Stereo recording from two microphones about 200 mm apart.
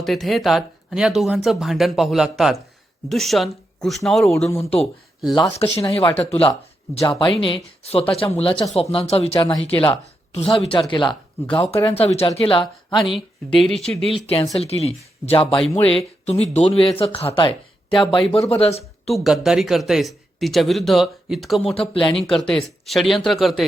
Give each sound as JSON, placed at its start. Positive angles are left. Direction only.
{"t": 0.0, "sound": "speech", "side_deg": 0}
{"t": 5.3, "sound": "speech", "side_deg": 20}
{"t": 5.5, "sound": "speech", "side_deg": 30}
{"t": 13.1, "sound": "speech", "side_deg": 0}
{"t": 14.1, "sound": "speech", "side_deg": 25}
{"t": 19.1, "sound": "speech", "side_deg": 0}
{"t": 21.8, "sound": "speech", "side_deg": 25}
{"t": 22.1, "sound": "speech", "side_deg": 0}